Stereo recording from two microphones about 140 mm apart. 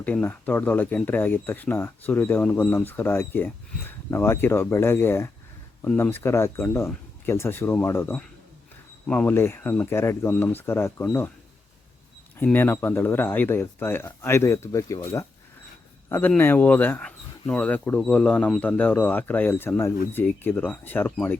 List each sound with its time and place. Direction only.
0.0 s speech: 10° left (ahead or behind)
12.4 s speech: 15° left (ahead or behind)